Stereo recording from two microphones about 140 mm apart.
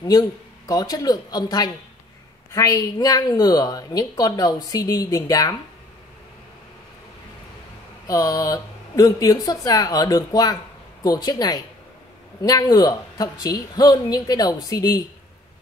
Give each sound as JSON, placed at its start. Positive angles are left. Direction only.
{"t": 0.0, "sound": "a woman's voice", "side_deg": 25}
{"t": 8.1, "sound": "a woman's voice", "side_deg": 25}